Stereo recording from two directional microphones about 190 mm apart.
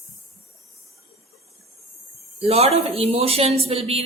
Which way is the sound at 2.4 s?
35° right (ahead or behind).